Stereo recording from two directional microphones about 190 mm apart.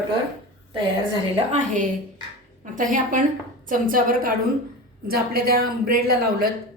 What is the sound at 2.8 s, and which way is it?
A woman's voice, 45° right (ahead or behind).